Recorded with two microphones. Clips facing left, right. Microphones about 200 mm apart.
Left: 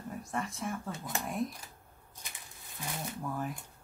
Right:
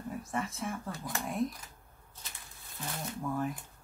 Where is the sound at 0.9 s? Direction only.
20° left (ahead or behind).